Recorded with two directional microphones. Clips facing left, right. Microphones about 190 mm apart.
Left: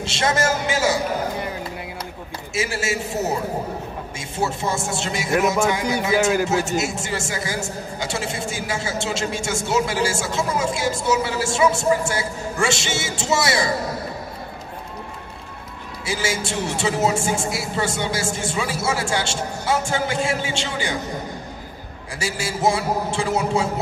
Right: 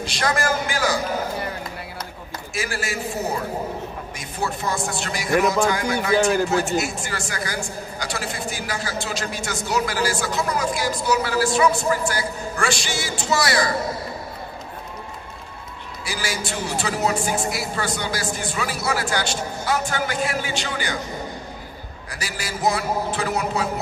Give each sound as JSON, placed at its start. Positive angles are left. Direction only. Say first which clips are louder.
{"t": 0.0, "sound": "a man's voice", "louder": "left 2 dB", "side_deg": 25}
{"t": 2.5, "sound": "a man's voice", "louder": "left 3 dB", "side_deg": 25}
{"t": 16.1, "sound": "a man's voice", "louder": "left 4 dB", "side_deg": 25}
{"t": 22.2, "sound": "a man's voice", "louder": "left 3 dB", "side_deg": 25}